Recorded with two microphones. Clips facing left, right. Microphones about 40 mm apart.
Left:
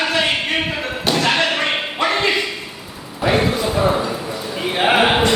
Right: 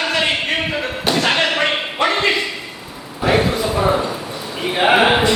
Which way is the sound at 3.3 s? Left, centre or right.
Centre.